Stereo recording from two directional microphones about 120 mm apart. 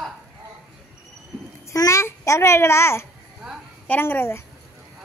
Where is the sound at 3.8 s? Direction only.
15° left (ahead or behind).